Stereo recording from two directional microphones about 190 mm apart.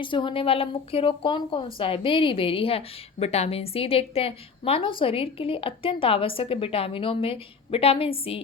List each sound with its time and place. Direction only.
0.0 s a woman's voice: 25° left (ahead or behind)